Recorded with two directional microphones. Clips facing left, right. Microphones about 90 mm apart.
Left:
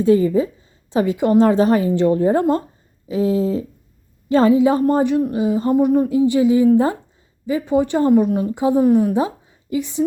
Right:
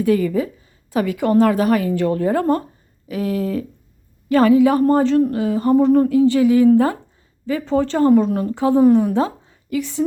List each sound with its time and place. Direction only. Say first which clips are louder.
0.0 s a woman's voice: left 3 dB; 25° left (ahead or behind); by 6.1 s 10° left (ahead or behind)
6.1 s a woman's voice: right 1 dB; 20° left (ahead or behind)